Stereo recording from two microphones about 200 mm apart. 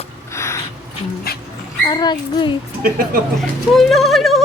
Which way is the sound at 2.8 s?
45° right (ahead or behind).